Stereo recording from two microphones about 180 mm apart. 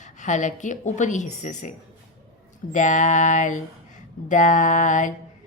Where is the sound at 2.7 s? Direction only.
45° left (ahead or behind).